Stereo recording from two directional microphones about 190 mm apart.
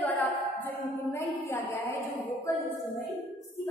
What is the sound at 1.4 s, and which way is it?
Female singing, 15° left (ahead or behind).